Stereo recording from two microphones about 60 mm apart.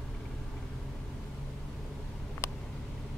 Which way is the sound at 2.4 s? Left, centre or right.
Left.